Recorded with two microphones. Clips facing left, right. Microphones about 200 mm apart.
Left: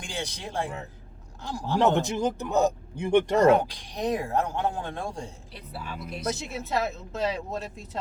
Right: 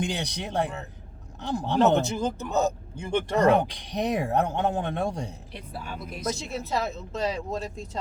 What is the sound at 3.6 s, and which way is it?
A man's voice, 20° right (ahead or behind).